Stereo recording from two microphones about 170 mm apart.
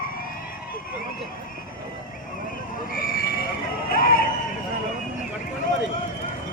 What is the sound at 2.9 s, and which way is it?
Vehicle, 55° left (ahead or behind).